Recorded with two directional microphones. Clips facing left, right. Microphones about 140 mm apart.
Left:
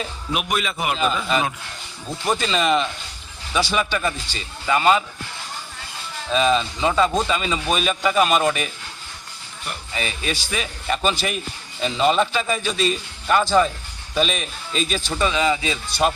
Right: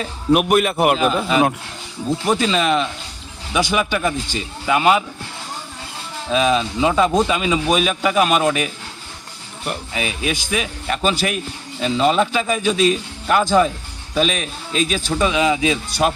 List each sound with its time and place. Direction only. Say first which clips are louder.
0.3 s a man's voice: right 10 dB; 55° right (ahead or behind)
1.3 s speech: right 6 dB; 5° right (ahead or behind)
3.5 s speech: right 3 dB; 15° right (ahead or behind)
6.3 s speech: right 2 dB; 5° right (ahead or behind)
9.9 s speech: right 2 dB; 5° right (ahead or behind)
13.4 s speech: right 3 dB; 15° right (ahead or behind)
14.2 s speech: right 3 dB; centre (ahead or behind)